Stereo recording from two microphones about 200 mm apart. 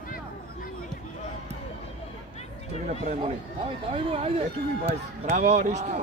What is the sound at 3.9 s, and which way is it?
Speech, 30° right (ahead or behind).